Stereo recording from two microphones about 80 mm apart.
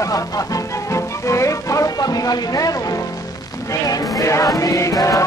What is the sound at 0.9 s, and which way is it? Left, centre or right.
Music, left.